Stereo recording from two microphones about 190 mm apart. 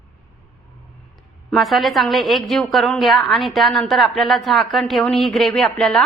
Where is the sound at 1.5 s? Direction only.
Centre (ahead or behind).